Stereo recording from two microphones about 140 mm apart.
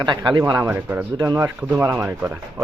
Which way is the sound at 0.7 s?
15° right (ahead or behind).